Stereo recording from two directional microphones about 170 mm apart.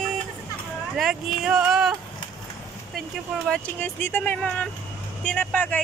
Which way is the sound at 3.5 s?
10° left (ahead or behind).